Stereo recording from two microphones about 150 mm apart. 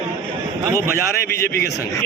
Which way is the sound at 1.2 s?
90° left.